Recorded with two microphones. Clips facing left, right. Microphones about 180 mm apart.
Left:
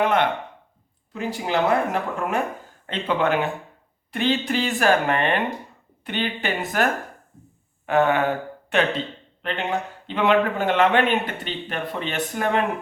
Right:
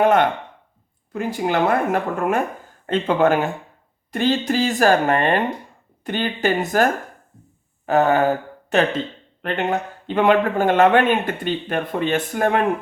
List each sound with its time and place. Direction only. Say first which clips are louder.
0.0 s a sound: right 4 dB; 45° right (ahead or behind)
1.1 s a man's voice: right 3 dB; 50° right (ahead or behind)
7.9 s a man's voice: right 3 dB; 40° right (ahead or behind)